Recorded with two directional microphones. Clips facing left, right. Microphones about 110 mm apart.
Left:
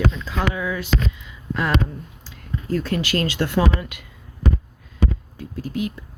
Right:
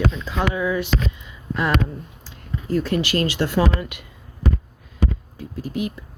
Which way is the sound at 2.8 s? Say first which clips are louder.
Right 1 dB; 20° right (ahead or behind).